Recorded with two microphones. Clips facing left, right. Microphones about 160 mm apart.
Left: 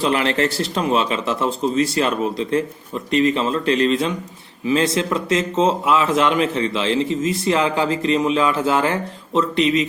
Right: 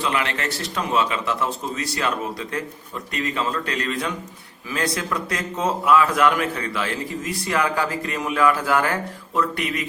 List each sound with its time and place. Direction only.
0.0 s a man's voice: 35° left (ahead or behind)